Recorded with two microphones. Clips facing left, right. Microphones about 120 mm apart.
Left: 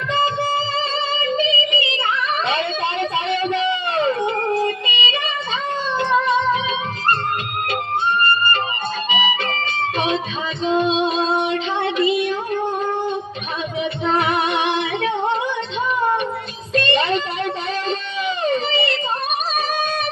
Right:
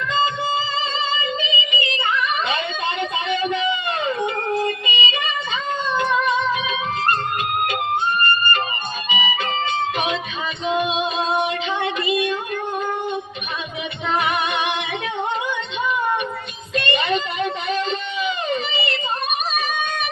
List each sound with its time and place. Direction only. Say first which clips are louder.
1.4 s music: left 5 dB; 30° left (ahead or behind)
3.5 s a sound: left 2 dB; 30° left (ahead or behind)
4.6 s yodeling: left 1 dB; 30° left (ahead or behind)
6.0 s music: left 3 dB; 30° left (ahead or behind)
9.1 s music: even; 30° left (ahead or behind)
14.1 s music: left 1 dB; 30° left (ahead or behind)
16.7 s music: left 3 dB; 30° left (ahead or behind)
18.4 s a sound: left 4 dB; 35° left (ahead or behind)